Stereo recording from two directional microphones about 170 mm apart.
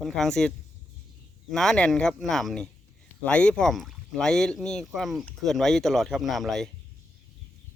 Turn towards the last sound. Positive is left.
turn(degrees=0)  # may be behind; listen again after turning